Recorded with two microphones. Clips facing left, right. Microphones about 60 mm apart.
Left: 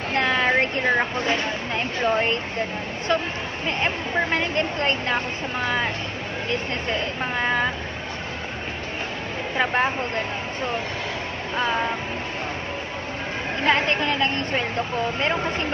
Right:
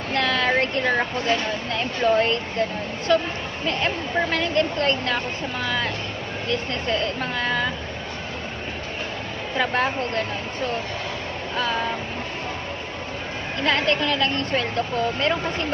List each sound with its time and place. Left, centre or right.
0.1 s a sound: left
1.7 s speech: left
9.6 s speech: centre
13.7 s speech: left